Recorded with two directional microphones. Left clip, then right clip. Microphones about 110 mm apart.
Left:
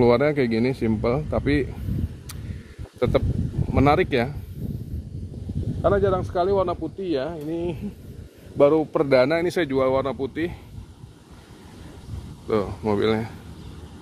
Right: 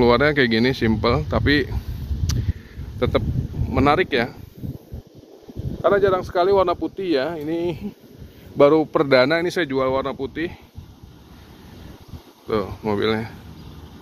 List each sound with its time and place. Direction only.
0.0 s speech: 10° left (ahead or behind)
3.0 s speech: 20° left (ahead or behind)
5.8 s speech: 35° right (ahead or behind); by 9.0 s 15° right (ahead or behind)
9.0 s speech: 10° left (ahead or behind)
9.4 s speech: 25° left (ahead or behind)
12.4 s speech: 20° left (ahead or behind)